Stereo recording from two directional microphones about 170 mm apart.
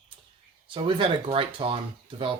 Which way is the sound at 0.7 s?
30° right (ahead or behind).